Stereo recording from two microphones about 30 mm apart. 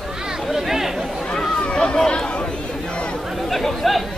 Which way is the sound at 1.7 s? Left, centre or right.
Left.